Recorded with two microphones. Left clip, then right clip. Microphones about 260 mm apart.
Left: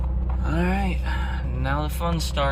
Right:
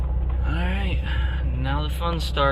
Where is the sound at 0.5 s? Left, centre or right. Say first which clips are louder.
Left 4 dB; centre.